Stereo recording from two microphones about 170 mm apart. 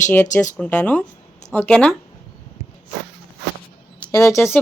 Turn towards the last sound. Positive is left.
turn(degrees=15)  # may be behind; listen again after turning